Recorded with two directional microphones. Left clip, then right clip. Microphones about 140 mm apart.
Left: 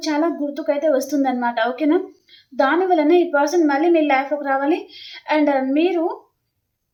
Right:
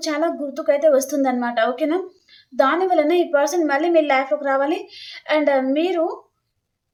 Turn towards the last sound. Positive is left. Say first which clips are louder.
# even
turn(degrees=-25)  # may be behind; listen again after turning